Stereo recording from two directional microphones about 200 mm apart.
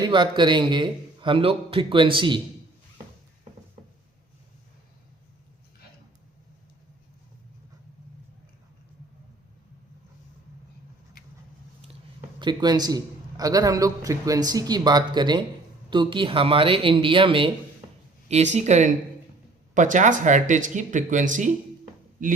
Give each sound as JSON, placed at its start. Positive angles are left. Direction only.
{"t": 0.0, "sound": "a man's voice", "side_deg": -20}
{"t": 12.4, "sound": "a man's voice", "side_deg": -20}